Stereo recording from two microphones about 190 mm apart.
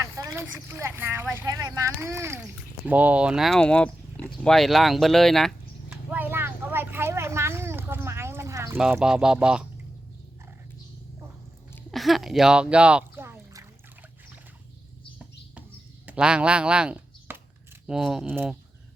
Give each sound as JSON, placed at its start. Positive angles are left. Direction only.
{"t": 0.0, "sound": "speech", "side_deg": -15}
{"t": 1.5, "sound": "speech", "side_deg": -20}
{"t": 2.8, "sound": "a sound", "side_deg": -10}
{"t": 8.8, "sound": "speech", "side_deg": -5}
{"t": 11.9, "sound": "a sound", "side_deg": 0}
{"t": 16.0, "sound": "speech", "side_deg": -5}